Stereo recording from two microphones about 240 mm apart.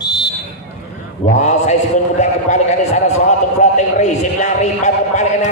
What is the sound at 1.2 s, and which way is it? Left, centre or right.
A man's voice, left.